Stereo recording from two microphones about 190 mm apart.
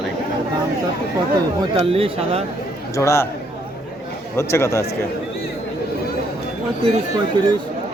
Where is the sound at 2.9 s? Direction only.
15° left (ahead or behind).